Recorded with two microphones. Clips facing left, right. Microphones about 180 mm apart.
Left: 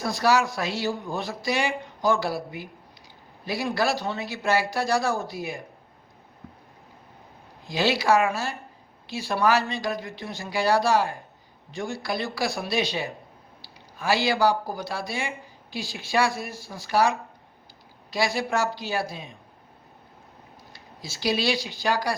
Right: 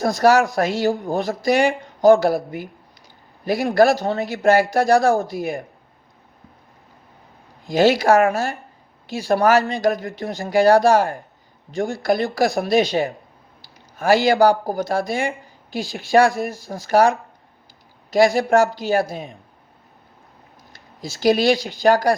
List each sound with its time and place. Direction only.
0.0 s a man's voice: 45° right (ahead or behind)
7.7 s speech: 45° right (ahead or behind)
13.6 s a sound: 45° right (ahead or behind)
14.6 s speech: 45° right (ahead or behind)
16.3 s speech: 15° right (ahead or behind)
16.8 s speech: 45° right (ahead or behind)
20.7 s speech: 45° right (ahead or behind)